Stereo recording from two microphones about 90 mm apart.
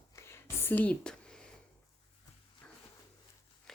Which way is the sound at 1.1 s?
10° left (ahead or behind).